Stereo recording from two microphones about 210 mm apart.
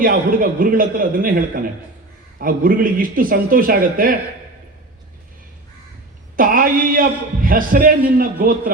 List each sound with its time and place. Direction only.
0.0 s speech: 40° right (ahead or behind)
6.3 s a man's voice: 40° right (ahead or behind)